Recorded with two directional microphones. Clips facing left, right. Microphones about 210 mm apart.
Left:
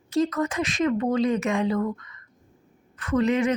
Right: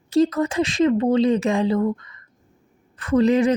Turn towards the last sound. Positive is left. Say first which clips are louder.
# right 5 dB
turn(degrees=-30)  # may be behind; listen again after turning